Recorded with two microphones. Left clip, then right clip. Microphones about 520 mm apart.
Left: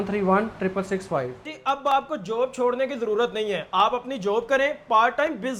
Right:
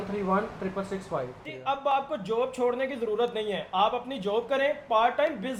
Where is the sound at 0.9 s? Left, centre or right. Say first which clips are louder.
Left 6 dB; left.